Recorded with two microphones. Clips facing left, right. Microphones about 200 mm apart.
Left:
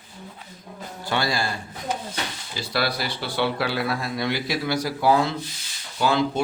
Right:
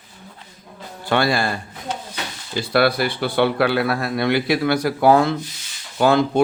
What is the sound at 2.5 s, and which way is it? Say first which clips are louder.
A man's voice: right 9 dB; 55° right (ahead or behind).